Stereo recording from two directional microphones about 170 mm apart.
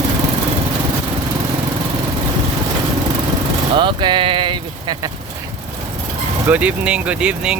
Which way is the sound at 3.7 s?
25° right (ahead or behind).